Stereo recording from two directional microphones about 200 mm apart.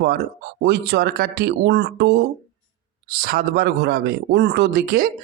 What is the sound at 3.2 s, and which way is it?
Speech, 50° right (ahead or behind).